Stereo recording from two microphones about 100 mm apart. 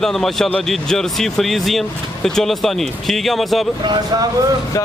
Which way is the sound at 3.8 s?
50° right (ahead or behind).